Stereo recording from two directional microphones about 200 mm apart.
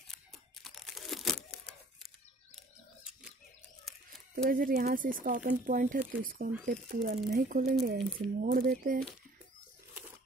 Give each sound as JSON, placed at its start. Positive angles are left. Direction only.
{"t": 0.1, "sound": "tearing", "side_deg": 0}
{"t": 3.0, "sound": "a sound", "side_deg": -5}
{"t": 4.5, "sound": "speech", "side_deg": -45}